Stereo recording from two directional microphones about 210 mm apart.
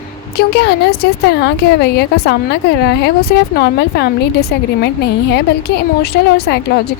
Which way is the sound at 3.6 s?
50° left (ahead or behind).